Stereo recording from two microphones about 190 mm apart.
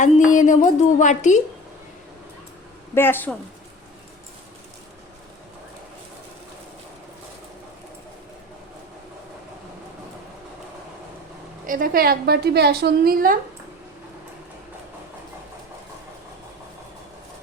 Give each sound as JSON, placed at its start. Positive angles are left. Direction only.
{"t": 0.0, "sound": "a sound", "side_deg": 40}
{"t": 2.9, "sound": "speech", "side_deg": 10}
{"t": 11.6, "sound": "a woman's voice", "side_deg": -45}